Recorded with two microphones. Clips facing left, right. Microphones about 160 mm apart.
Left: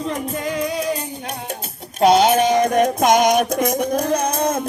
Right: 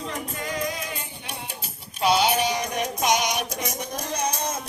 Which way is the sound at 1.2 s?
50° left (ahead or behind).